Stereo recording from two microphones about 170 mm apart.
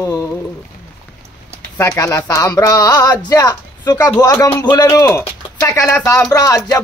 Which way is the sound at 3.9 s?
10° left (ahead or behind).